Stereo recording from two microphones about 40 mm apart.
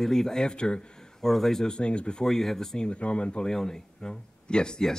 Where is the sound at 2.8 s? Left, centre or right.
Left.